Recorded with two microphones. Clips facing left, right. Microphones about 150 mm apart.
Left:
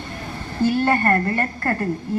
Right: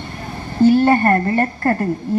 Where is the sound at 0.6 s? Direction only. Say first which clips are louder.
Right 6 dB; 30° right (ahead or behind).